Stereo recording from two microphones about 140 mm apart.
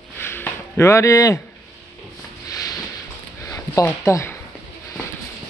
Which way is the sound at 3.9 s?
20° left (ahead or behind).